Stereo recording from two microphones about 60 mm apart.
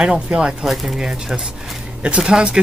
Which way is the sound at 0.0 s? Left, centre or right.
Centre.